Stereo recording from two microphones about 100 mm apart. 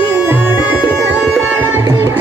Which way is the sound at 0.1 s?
25° right (ahead or behind).